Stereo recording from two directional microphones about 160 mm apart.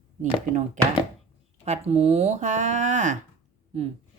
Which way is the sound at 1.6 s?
40° right (ahead or behind).